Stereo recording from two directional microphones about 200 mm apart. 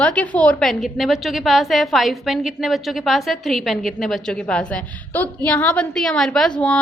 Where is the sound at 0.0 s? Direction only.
5° left (ahead or behind).